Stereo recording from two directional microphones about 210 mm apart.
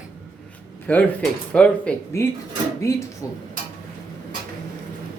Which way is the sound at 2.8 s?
15° left (ahead or behind).